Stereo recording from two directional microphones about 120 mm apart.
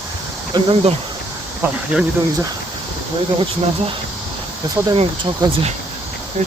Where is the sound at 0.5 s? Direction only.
50° right (ahead or behind).